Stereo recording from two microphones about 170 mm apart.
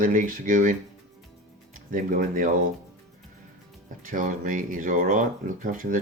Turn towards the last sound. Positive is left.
turn(degrees=-50)  # may be behind; listen again after turning